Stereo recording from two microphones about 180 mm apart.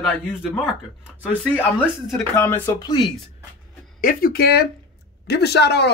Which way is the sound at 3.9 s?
55° left (ahead or behind).